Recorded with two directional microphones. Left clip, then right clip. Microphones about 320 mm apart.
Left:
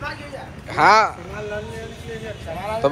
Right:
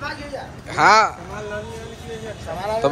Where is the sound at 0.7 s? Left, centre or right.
Centre.